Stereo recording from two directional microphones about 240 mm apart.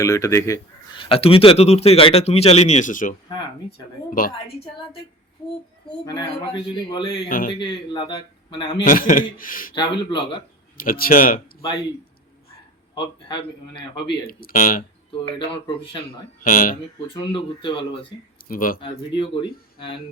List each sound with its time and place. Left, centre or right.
0.0 s speech: centre; by 4.3 s left
6.1 s speech: centre
7.3 s speech: left
7.6 s speech: centre
8.8 s speech: left
10.8 s speech: left
12.9 s speech: centre
13.9 s speech: left
15.4 s speech: left
16.4 s speech: left
17.2 s speech: left
18.4 s speech: left
18.8 s speech: left